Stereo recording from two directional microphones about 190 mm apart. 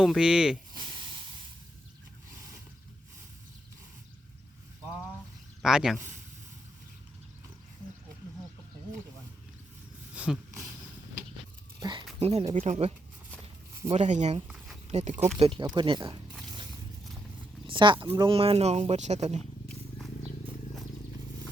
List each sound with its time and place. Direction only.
0.0 s speech: 5° right (ahead or behind)
5.6 s speech: centre (ahead or behind)
10.2 s a sound: 10° right (ahead or behind)
11.8 s a sound: 25° right (ahead or behind)
12.2 s speech: 30° right (ahead or behind)
13.9 s speech: 35° right (ahead or behind)
17.7 s speech: 25° right (ahead or behind)